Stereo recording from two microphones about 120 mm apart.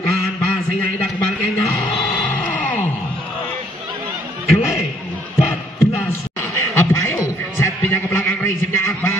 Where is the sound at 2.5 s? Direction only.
15° left (ahead or behind).